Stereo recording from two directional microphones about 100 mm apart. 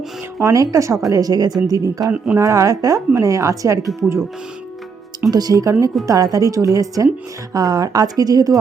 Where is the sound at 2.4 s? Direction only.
35° right (ahead or behind).